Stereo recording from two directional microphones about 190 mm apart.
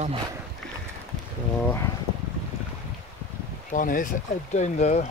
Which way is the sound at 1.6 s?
15° left (ahead or behind).